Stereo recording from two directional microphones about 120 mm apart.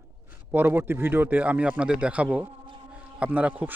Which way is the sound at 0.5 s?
15° right (ahead or behind).